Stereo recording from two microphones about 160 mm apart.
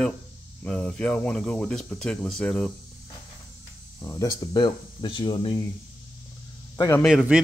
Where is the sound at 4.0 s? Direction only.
25° left (ahead or behind).